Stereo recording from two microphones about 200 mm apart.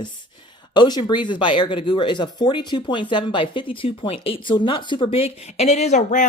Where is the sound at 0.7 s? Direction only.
20° left (ahead or behind).